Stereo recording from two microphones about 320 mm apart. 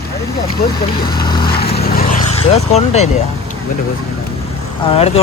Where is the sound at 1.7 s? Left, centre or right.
Left.